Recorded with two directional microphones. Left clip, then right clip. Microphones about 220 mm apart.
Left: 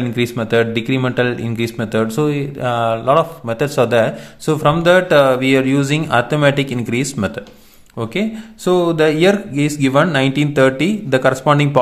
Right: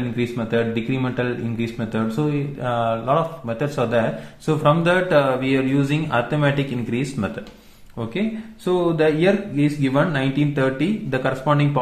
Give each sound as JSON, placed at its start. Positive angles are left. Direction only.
{"t": 0.1, "sound": "speech", "side_deg": 40}
{"t": 8.6, "sound": "speech", "side_deg": 45}